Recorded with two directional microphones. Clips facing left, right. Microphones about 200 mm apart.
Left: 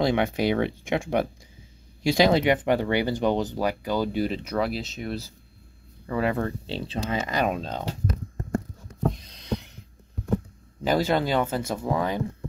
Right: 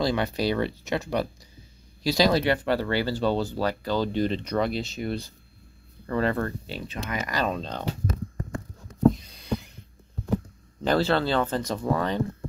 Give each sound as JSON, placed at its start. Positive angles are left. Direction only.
{"t": 0.0, "sound": "speech", "side_deg": 20}
{"t": 6.7, "sound": "speech", "side_deg": 30}
{"t": 9.1, "sound": "a sound", "side_deg": -5}
{"t": 10.8, "sound": "speech", "side_deg": 10}